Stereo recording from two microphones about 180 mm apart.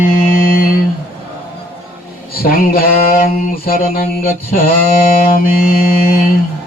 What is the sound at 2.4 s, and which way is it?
Mantra, 55° left (ahead or behind).